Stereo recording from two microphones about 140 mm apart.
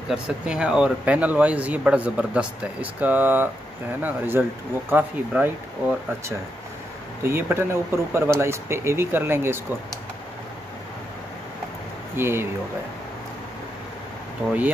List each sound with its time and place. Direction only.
0.1 s speech: 5° right (ahead or behind)
7.2 s speech: 15° right (ahead or behind)
12.2 s speech: 15° right (ahead or behind)